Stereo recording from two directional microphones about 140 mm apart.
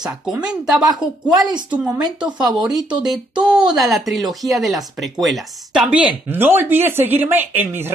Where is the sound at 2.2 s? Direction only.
30° right (ahead or behind).